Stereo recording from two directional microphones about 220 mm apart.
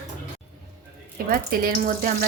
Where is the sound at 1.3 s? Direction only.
40° right (ahead or behind).